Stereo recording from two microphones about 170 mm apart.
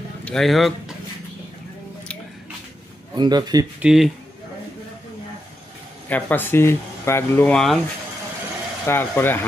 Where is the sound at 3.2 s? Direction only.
25° right (ahead or behind).